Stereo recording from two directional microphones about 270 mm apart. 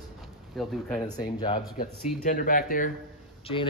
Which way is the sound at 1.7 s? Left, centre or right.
Left.